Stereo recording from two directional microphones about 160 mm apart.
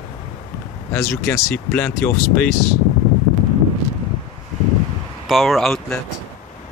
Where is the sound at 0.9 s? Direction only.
15° left (ahead or behind).